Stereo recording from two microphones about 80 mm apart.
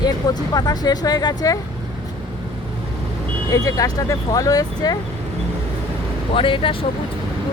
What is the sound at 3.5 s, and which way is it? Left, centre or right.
Speech, left.